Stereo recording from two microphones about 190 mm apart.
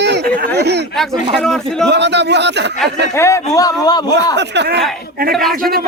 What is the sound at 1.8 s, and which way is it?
Speech, 65° right (ahead or behind).